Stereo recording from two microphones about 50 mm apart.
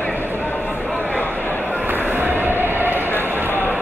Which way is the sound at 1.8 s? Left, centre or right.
Right.